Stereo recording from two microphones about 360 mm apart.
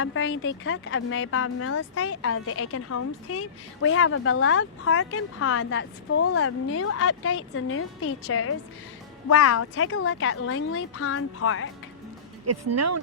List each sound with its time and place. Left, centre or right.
0.0 s speech: left
12.5 s speech: right